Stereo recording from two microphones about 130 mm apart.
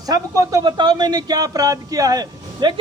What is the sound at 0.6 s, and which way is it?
Speech, 35° right (ahead or behind).